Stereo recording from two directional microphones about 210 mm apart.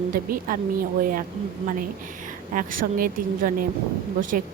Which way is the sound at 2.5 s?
40° right (ahead or behind).